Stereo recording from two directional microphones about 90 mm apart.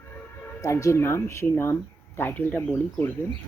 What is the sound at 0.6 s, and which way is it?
Speech, 35° left (ahead or behind).